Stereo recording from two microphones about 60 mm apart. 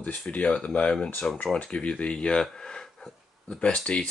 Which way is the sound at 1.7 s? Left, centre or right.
Left.